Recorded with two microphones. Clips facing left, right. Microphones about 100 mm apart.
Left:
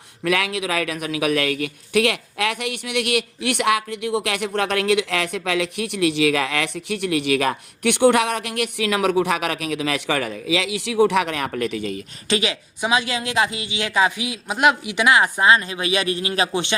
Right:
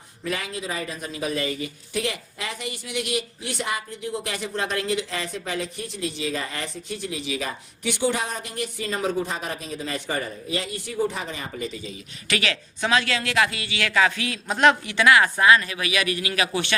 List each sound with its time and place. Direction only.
0.3 s a man's voice: 75° left (ahead or behind)
12.3 s speech: 20° left (ahead or behind)